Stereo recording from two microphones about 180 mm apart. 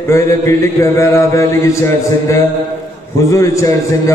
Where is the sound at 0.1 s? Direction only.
15° left (ahead or behind).